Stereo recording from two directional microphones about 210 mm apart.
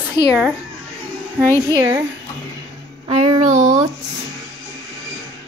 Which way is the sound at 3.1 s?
30° right (ahead or behind).